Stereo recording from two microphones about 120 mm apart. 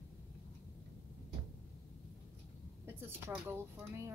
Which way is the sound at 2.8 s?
15° right (ahead or behind).